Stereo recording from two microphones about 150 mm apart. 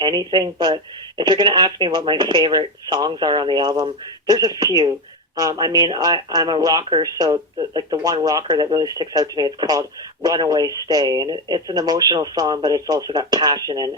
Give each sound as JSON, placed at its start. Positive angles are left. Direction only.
{"t": 0.0, "sound": "speech", "side_deg": -30}